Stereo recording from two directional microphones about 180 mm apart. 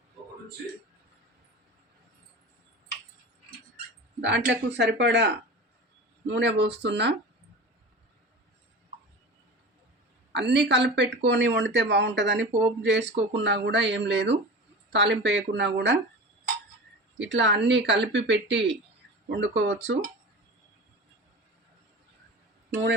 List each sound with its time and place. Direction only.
4.2 s speech: 85° right
10.3 s speech: 75° right (ahead or behind)
17.2 s speech: 80° right
19.3 s speech: 90° right